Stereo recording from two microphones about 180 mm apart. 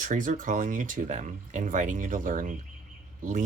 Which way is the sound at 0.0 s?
45° right (ahead or behind).